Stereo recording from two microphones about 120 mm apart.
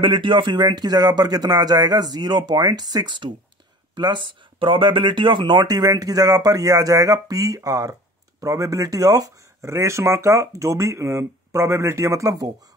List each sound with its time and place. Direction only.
0.0 s speech: 45° right (ahead or behind); by 12.4 s 25° right (ahead or behind)